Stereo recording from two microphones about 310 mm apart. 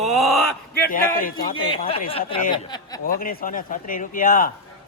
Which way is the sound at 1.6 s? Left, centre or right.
Centre.